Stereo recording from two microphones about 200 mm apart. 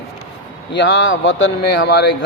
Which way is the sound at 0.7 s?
60° left (ahead or behind).